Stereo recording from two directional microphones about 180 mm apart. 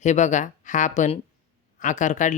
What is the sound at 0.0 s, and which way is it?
Speech, 40° left (ahead or behind).